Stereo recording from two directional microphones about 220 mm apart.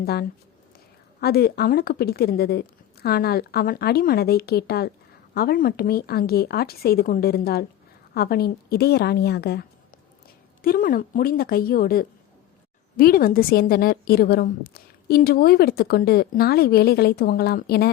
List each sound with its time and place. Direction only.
0.0 s a woman's voice: 45° left (ahead or behind)